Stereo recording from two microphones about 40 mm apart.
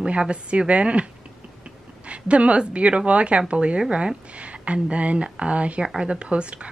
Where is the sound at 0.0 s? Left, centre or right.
Right.